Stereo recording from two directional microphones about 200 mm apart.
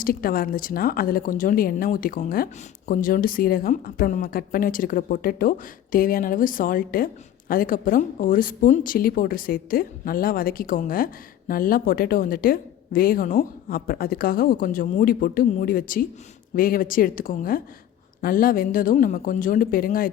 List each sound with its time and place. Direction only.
0.0 s a woman's voice: 45° left (ahead or behind)